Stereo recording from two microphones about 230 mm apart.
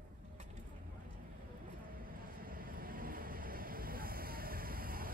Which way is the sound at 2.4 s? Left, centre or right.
Right.